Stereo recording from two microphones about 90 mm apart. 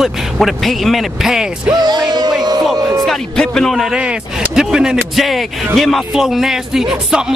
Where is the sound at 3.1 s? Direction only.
5° left (ahead or behind).